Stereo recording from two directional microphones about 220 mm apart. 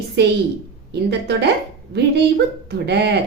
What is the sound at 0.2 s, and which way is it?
A woman's voice, 50° right (ahead or behind).